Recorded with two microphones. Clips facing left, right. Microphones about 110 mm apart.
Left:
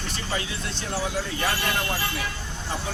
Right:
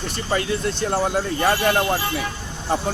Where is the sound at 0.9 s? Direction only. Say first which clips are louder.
Right 5 dB; 55° right (ahead or behind).